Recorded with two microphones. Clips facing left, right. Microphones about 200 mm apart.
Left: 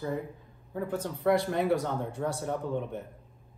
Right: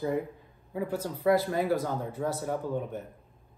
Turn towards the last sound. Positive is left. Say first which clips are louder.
# even
turn(degrees=-5)  # may be behind; listen again after turning